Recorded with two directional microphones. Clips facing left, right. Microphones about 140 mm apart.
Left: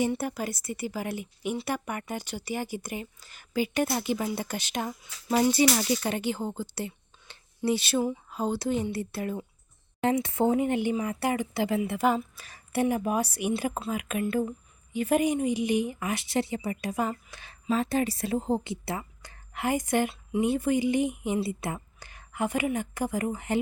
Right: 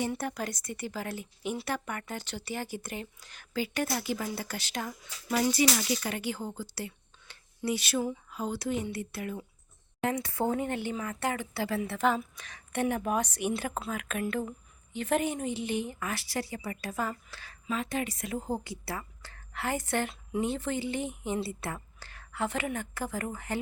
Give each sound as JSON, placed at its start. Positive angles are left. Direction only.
{"t": 0.0, "sound": "speech", "side_deg": 10}
{"t": 3.5, "sound": "speech", "side_deg": 15}
{"t": 17.7, "sound": "a woman's voice", "side_deg": 35}